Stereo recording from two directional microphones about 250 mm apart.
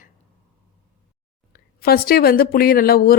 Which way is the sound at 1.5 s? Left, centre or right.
Left.